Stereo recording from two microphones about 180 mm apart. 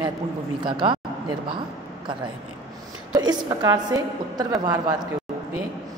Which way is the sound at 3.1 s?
25° right (ahead or behind).